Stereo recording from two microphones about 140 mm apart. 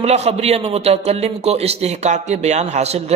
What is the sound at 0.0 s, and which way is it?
Speech, 50° right (ahead or behind).